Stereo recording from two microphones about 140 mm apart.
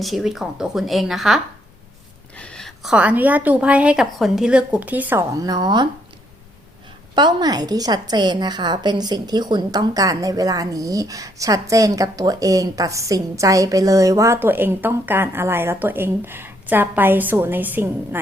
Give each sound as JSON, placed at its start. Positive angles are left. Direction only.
{"t": 0.0, "sound": "speech", "side_deg": 0}
{"t": 2.3, "sound": "a sound", "side_deg": 10}
{"t": 2.9, "sound": "a woman's voice", "side_deg": -10}
{"t": 5.3, "sound": "a woman's voice", "side_deg": -25}
{"t": 7.2, "sound": "a woman's voice", "side_deg": -30}